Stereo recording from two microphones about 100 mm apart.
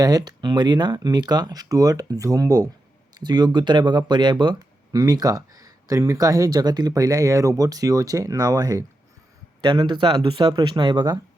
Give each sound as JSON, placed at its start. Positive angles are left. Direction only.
{"t": 0.0, "sound": "speech", "side_deg": -40}
{"t": 3.2, "sound": "speech", "side_deg": -45}